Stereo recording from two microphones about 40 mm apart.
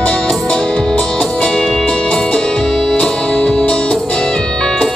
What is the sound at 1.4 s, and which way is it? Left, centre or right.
Music, centre.